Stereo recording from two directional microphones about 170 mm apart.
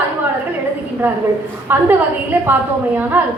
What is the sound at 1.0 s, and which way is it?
A woman's voice, 10° right (ahead or behind).